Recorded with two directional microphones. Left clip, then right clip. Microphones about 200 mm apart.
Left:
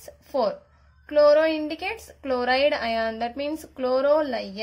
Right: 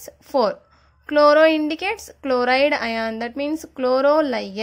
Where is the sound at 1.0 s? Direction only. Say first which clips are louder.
Right 4 dB; 35° right (ahead or behind).